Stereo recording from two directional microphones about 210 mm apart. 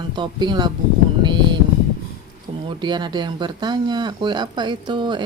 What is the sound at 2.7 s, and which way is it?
Speech, 20° right (ahead or behind).